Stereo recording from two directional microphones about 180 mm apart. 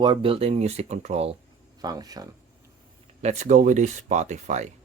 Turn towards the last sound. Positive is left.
turn(degrees=-40)  # may be behind; listen again after turning